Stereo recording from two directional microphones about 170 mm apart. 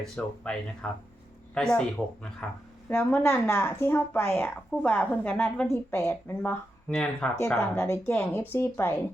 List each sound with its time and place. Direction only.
0.0 s speech: 5° left (ahead or behind)
2.9 s a woman's voice: 10° left (ahead or behind)